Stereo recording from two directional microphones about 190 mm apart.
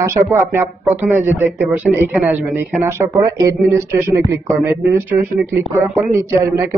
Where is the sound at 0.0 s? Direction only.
15° right (ahead or behind).